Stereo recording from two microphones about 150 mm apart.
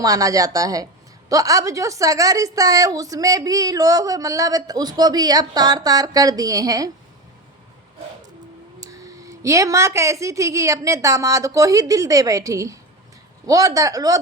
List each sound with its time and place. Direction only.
0.0 s a woman's voice: 25° right (ahead or behind)
8.8 s a woman's voice: 20° right (ahead or behind)